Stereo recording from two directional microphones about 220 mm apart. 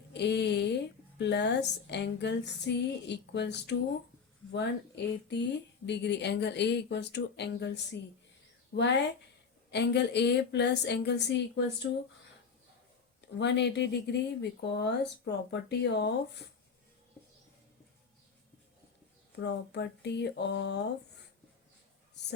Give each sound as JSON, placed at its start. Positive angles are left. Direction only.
{"t": 0.1, "sound": "speech", "side_deg": 50}
{"t": 13.2, "sound": "speech", "side_deg": 50}
{"t": 19.4, "sound": "speech", "side_deg": 50}